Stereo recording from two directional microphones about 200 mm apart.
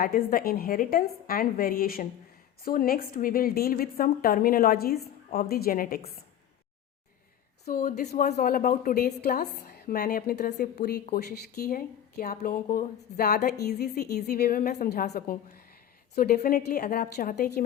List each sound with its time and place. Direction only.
0.0 s a woman's voice: 45° left (ahead or behind)
7.6 s a woman's voice: 45° left (ahead or behind)